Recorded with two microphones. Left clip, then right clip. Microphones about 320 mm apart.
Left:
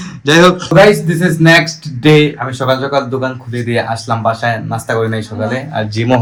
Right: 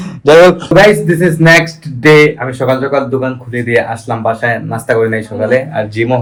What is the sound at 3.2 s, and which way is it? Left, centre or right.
Speech, centre.